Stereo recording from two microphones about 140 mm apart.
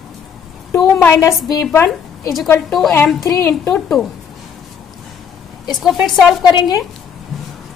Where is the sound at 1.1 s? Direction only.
25° left (ahead or behind).